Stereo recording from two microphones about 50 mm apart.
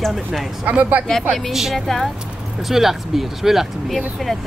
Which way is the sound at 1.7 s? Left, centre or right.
Centre.